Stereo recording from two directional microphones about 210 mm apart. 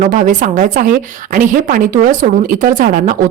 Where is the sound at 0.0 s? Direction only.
40° right (ahead or behind).